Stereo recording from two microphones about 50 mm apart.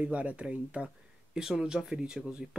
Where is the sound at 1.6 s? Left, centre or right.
Centre.